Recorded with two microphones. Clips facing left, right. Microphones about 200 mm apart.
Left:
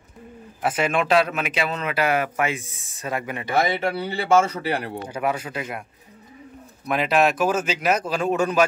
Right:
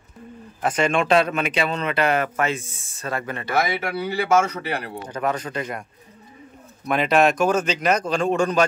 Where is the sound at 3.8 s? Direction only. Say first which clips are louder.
Even; 30° left (ahead or behind).